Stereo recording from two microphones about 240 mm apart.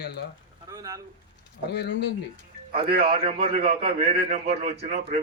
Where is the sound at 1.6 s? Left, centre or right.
Left.